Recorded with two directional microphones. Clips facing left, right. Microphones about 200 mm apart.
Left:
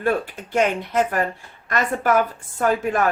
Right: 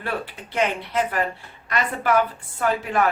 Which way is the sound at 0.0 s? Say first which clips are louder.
Left 7 dB; 45° left (ahead or behind).